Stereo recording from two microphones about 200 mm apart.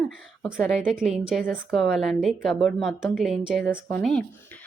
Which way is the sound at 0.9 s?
Centre (ahead or behind).